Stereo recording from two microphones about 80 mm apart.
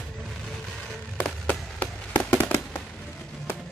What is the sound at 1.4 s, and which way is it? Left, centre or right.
Fireworks, left.